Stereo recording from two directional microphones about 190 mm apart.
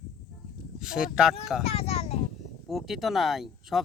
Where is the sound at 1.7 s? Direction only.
35° left (ahead or behind).